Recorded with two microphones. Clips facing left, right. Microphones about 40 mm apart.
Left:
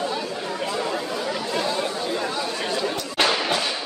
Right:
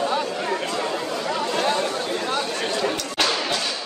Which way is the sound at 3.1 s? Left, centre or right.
Centre.